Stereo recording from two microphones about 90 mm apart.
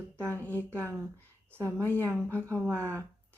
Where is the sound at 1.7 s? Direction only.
20° left (ahead or behind).